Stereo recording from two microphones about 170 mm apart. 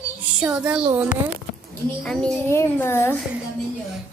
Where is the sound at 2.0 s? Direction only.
5° left (ahead or behind).